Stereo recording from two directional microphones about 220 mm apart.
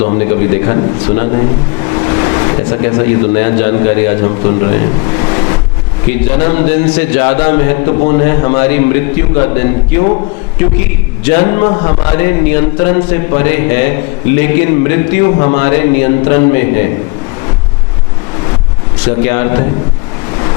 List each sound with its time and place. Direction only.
0.2 s speech: 15° left (ahead or behind)
5.3 s vehicle: 20° left (ahead or behind)
6.1 s speech: 15° left (ahead or behind)
11.3 s a man's voice: 15° left (ahead or behind)
19.0 s speech: 15° left (ahead or behind)